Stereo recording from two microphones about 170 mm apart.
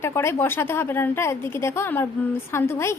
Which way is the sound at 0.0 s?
15° left (ahead or behind).